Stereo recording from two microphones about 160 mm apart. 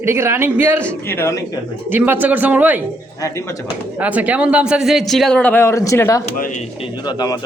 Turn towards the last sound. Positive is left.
turn(degrees=25)  # may be behind; listen again after turning